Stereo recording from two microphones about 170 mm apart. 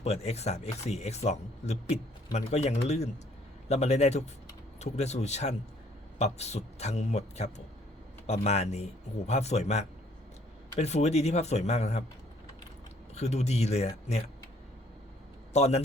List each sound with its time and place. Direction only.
0.0 s speech: 40° left (ahead or behind)
13.1 s speech: 40° left (ahead or behind)
15.5 s speech: 40° left (ahead or behind)